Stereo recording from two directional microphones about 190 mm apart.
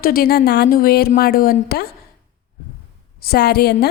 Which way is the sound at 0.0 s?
50° left (ahead or behind).